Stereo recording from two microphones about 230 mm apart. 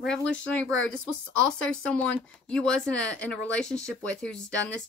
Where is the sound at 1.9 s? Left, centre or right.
Centre.